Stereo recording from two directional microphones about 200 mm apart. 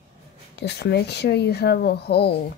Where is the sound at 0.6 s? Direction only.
55° left (ahead or behind).